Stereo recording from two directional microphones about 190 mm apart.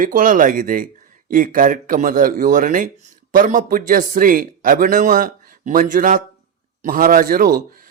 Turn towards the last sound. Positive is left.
turn(degrees=-45)  # may be behind; listen again after turning